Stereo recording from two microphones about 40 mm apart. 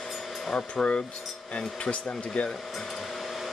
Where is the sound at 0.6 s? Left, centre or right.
Left.